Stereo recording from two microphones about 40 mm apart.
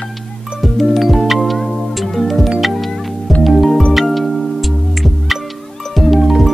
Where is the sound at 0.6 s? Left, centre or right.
Centre.